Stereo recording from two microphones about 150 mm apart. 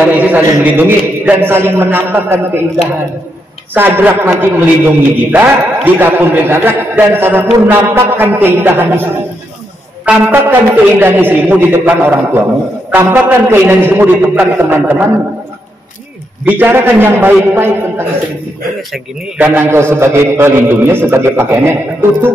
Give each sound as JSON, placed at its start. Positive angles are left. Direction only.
{"t": 0.0, "sound": "a man's voice", "side_deg": -10}
{"t": 3.7, "sound": "a man's voice", "side_deg": -15}
{"t": 16.4, "sound": "a man's voice", "side_deg": -15}
{"t": 19.3, "sound": "a man's voice", "side_deg": -15}